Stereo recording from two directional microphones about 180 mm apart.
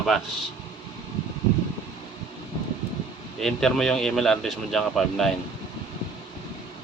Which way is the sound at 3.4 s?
5° left (ahead or behind).